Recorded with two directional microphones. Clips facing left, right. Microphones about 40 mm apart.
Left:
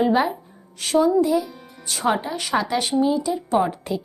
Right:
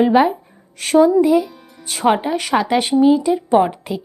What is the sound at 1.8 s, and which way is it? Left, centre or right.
Speech, right.